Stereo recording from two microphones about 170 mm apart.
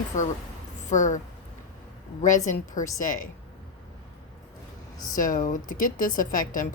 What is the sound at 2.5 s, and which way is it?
Speech, 50° left (ahead or behind).